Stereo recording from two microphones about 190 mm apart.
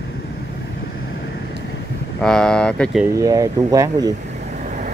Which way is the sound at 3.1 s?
15° right (ahead or behind).